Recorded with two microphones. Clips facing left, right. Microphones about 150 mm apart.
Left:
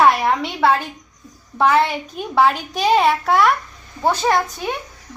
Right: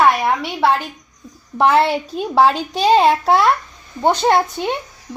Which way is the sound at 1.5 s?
30° right (ahead or behind).